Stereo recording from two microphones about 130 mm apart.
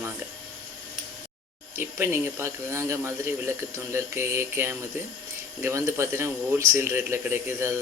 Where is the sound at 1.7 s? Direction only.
20° right (ahead or behind).